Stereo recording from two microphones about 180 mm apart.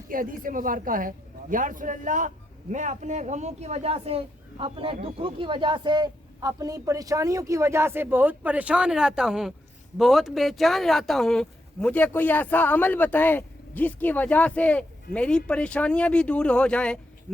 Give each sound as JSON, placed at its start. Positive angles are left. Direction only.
{"t": 0.1, "sound": "a woman's voice", "side_deg": -50}